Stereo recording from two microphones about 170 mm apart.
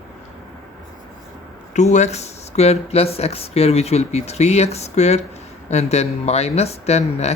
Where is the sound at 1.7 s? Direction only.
45° left (ahead or behind).